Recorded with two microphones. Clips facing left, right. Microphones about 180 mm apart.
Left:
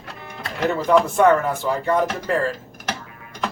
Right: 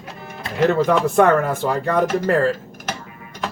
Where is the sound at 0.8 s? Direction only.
60° right (ahead or behind).